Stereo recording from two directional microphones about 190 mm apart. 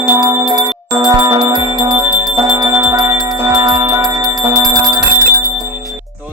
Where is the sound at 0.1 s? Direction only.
15° right (ahead or behind).